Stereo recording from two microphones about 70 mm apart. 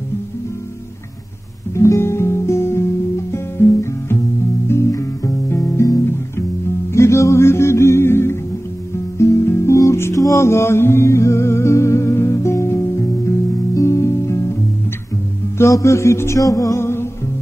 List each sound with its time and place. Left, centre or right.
1.8 s guitar: left
4.6 s music: left
15.5 s music: left
16.7 s music: left